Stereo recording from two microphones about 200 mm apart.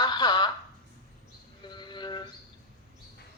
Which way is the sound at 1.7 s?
20° left (ahead or behind).